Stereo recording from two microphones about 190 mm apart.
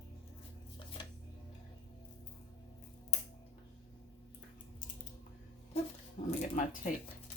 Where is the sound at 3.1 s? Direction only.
40° left (ahead or behind).